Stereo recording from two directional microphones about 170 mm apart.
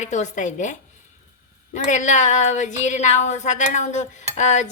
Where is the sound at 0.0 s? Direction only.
45° left (ahead or behind).